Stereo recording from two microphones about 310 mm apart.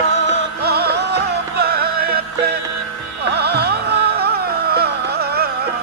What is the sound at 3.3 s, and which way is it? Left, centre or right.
Music, right.